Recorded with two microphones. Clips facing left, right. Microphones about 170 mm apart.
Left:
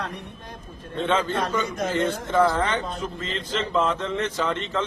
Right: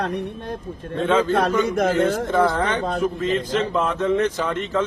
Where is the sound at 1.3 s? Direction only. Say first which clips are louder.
Right 7 dB; 60° right (ahead or behind).